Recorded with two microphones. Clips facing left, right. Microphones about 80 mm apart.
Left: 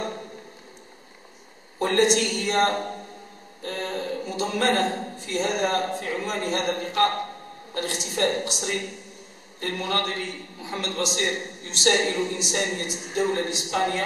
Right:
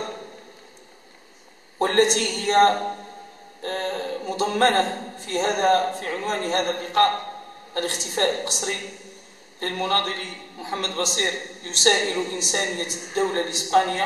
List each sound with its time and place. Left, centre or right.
1.8 s a woman's voice: right